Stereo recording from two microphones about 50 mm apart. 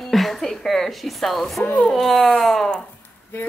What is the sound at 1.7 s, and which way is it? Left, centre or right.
Speech, left.